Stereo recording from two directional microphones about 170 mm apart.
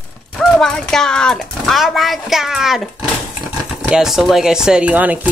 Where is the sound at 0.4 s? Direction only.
5° left (ahead or behind).